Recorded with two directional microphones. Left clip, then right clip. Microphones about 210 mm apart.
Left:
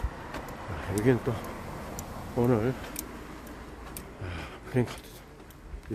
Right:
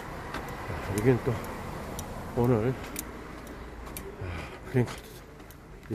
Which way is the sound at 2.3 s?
15° left (ahead or behind).